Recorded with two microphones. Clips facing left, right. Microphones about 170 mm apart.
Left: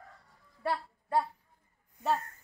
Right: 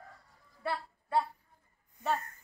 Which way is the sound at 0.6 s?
40° left (ahead or behind).